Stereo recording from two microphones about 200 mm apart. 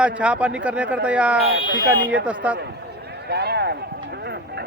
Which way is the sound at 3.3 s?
55° right (ahead or behind).